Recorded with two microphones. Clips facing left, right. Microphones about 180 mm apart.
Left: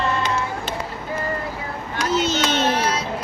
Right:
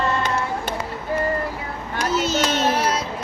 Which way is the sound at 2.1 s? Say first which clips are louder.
Left 1 dB; centre (ahead or behind).